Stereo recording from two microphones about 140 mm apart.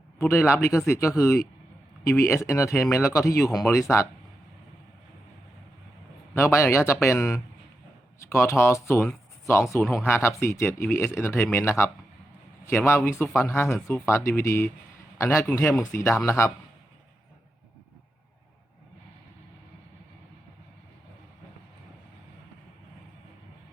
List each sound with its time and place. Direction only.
0.2 s speech: 20° left (ahead or behind)
6.3 s speech: 20° left (ahead or behind)
8.3 s speech: 20° left (ahead or behind)